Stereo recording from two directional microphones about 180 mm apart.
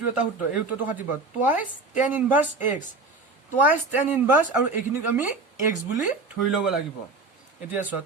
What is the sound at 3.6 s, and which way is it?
Speech, 10° right (ahead or behind).